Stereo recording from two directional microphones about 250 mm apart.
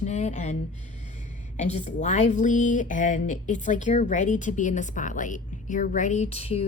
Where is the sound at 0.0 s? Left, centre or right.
Left.